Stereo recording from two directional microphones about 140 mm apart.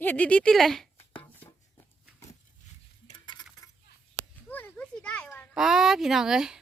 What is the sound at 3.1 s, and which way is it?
Cutlery, 30° left (ahead or behind).